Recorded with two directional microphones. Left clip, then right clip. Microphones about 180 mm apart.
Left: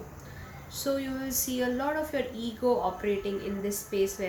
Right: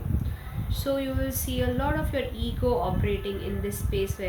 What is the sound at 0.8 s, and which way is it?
A woman's voice, 5° right (ahead or behind).